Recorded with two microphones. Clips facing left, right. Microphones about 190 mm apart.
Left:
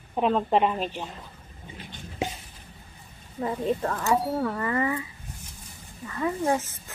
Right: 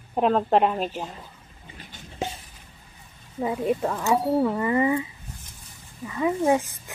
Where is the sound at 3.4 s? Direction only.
10° right (ahead or behind).